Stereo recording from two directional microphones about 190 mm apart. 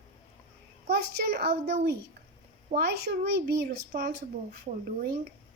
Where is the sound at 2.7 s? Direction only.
30° right (ahead or behind).